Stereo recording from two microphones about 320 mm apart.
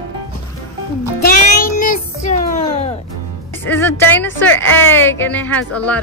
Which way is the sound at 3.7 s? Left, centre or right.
Centre.